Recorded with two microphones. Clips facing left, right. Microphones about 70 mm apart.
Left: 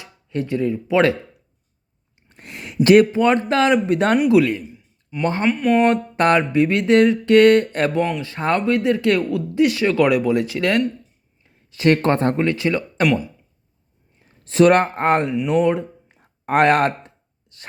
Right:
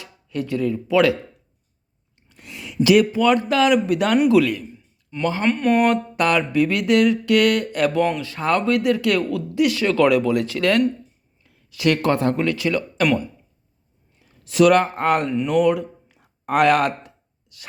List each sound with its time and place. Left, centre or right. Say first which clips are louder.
0.0 s speech: left 2 dB; left
2.3 s a sound: left 3 dB; left
4.3 s speech: left 1 dB; left
5.4 s speech: left 1 dB; centre
5.9 s a sound: left 3 dB; left
8.2 s speech: even; left
11.4 s speech: left 3 dB; left
14.2 s speech: left 1 dB; left
15.3 s speech: left 1 dB; centre
15.5 s speech: right 1 dB; left
17.5 s a sound: left 2 dB; left